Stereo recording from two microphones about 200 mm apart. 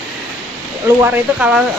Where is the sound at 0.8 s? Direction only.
10° right (ahead or behind).